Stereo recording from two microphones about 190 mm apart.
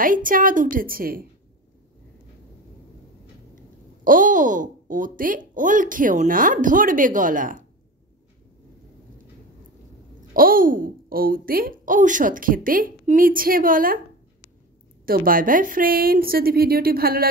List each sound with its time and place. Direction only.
0.0 s speech: 45° right (ahead or behind)
4.0 s speech: 45° right (ahead or behind)
10.3 s speech: 50° right (ahead or behind)
15.0 s speech: 50° right (ahead or behind)